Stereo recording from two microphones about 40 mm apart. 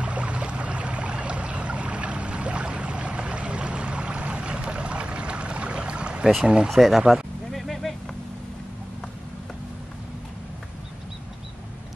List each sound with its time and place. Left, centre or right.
0.0 s boat: right
6.4 s speech: right
6.7 s speech: centre
7.5 s vehicle: centre